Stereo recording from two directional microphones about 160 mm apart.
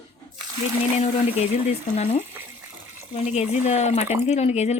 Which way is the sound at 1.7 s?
40° left (ahead or behind).